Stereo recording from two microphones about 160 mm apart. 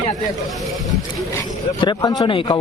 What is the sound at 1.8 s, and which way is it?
Speech, 25° left (ahead or behind).